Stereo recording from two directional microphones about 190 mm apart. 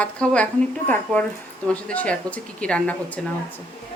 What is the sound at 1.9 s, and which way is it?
Speech, 5° left (ahead or behind).